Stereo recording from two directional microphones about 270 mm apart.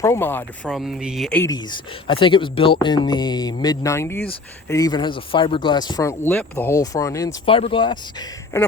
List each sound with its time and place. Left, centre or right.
0.0 s speech: centre